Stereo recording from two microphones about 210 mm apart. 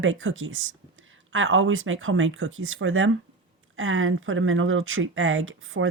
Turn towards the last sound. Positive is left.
turn(degrees=-70)  # may be behind; listen again after turning